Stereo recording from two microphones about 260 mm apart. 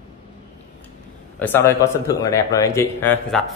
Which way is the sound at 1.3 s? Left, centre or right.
Centre.